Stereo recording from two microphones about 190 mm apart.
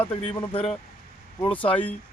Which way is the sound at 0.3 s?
25° left (ahead or behind).